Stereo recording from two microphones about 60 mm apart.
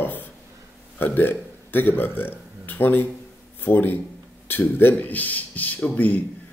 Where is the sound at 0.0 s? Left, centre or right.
Left.